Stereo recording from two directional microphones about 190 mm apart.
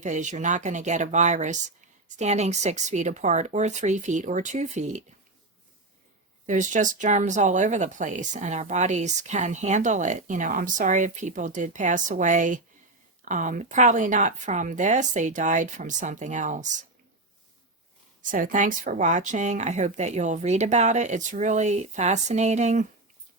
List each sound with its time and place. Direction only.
0.0 s speech: 40° right (ahead or behind)
6.4 s speech: 40° right (ahead or behind)
18.2 s speech: 45° right (ahead or behind)